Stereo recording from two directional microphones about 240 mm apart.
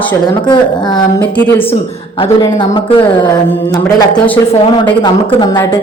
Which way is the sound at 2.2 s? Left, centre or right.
Centre.